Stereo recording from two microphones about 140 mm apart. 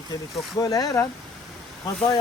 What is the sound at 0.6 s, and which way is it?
Speech, 25° left (ahead or behind).